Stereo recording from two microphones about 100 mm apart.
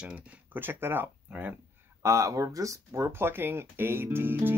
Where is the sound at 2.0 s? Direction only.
30° right (ahead or behind).